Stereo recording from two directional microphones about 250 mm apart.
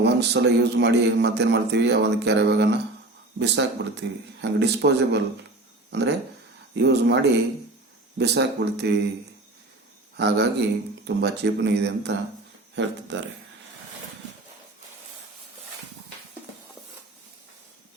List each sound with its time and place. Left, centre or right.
0.0 s a man's voice: right
10.2 s a man's voice: right